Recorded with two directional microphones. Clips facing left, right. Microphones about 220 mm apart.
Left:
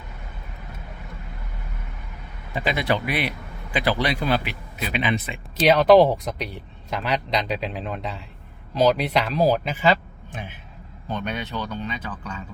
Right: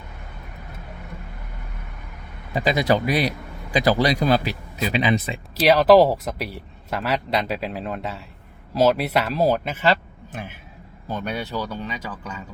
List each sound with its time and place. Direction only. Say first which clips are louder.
2.6 s a man's voice: right 4 dB; 40° right (ahead or behind)
5.5 s speech: right 1 dB; centre (ahead or behind)